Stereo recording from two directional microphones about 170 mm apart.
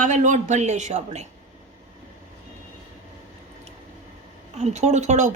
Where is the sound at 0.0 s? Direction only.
45° right (ahead or behind).